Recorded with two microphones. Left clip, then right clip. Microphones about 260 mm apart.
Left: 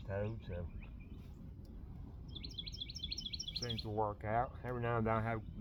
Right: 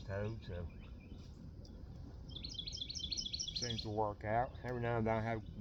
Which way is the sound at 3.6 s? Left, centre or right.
Left.